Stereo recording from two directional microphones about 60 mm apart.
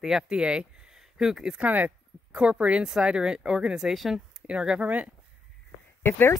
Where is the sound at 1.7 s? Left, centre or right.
Right; by 4.2 s centre.